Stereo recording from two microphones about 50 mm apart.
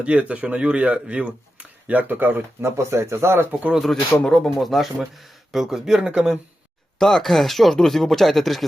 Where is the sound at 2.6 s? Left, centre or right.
Right.